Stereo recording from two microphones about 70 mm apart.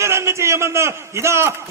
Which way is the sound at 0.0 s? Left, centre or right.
Right.